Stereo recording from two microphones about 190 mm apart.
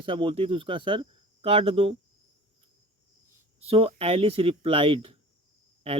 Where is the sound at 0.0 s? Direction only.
25° right (ahead or behind).